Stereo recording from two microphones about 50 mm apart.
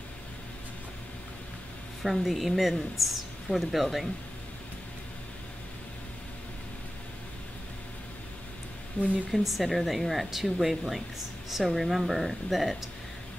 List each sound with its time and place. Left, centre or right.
2.0 s speech: centre
9.0 s speech: left
9.3 s speech: centre